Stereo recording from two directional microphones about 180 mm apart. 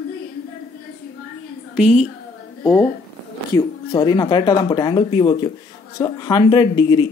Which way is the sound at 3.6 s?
20° left (ahead or behind).